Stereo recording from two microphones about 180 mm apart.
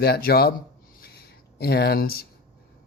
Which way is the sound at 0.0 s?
60° left (ahead or behind).